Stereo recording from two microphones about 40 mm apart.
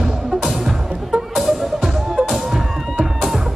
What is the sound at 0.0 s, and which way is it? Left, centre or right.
Music, centre.